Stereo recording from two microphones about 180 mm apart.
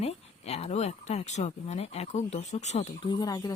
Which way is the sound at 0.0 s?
35° left (ahead or behind).